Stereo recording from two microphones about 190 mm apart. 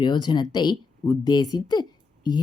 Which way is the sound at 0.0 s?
25° left (ahead or behind).